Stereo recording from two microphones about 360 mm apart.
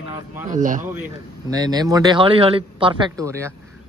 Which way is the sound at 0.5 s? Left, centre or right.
Right.